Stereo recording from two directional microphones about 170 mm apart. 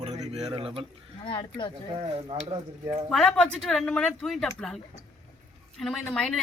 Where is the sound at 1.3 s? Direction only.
30° left (ahead or behind).